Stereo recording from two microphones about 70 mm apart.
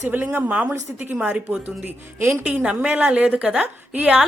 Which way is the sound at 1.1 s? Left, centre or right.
Centre.